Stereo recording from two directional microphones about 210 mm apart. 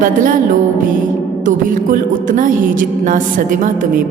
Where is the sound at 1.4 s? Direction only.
40° right (ahead or behind).